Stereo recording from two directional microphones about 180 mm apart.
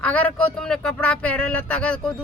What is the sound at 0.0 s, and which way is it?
A woman's voice, 10° left (ahead or behind).